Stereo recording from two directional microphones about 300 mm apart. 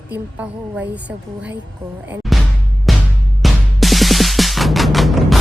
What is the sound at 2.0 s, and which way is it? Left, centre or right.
Music, centre.